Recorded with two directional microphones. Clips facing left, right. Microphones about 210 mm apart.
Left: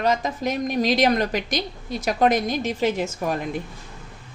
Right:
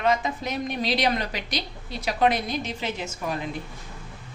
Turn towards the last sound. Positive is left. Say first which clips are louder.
# left 6 dB
turn(degrees=45)  # may be behind; listen again after turning